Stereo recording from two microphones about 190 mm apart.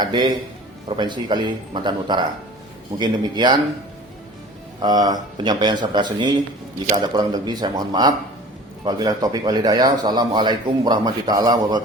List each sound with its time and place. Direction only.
0.0 s speech: 20° right (ahead or behind)
4.8 s speech: 20° right (ahead or behind)